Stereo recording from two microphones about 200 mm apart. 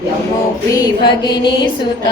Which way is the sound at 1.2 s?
25° left (ahead or behind).